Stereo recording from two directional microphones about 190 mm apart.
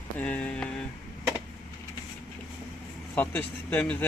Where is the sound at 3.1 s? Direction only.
10° left (ahead or behind).